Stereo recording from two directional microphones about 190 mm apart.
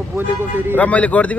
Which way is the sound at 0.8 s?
5° left (ahead or behind).